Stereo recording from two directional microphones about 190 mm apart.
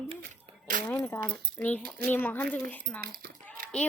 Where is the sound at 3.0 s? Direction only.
50° right (ahead or behind).